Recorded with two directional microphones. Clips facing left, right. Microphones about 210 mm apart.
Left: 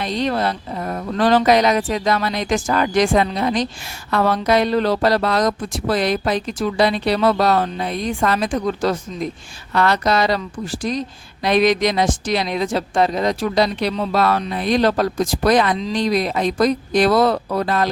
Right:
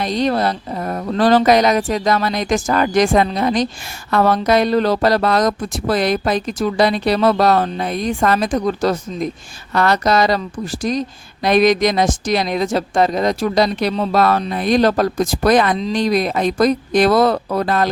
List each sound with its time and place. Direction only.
0.0 s speech: 40° right (ahead or behind)